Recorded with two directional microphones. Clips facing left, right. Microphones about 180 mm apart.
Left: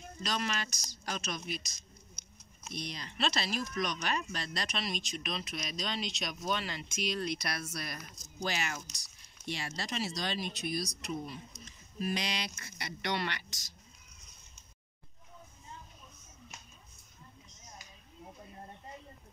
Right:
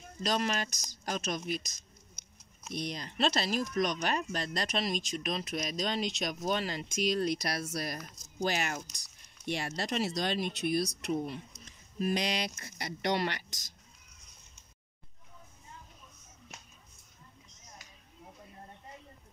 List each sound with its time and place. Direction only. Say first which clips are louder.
0.2 s speech: right 4 dB; 45° right (ahead or behind)
12.0 s speech: right 4 dB; 45° right (ahead or behind)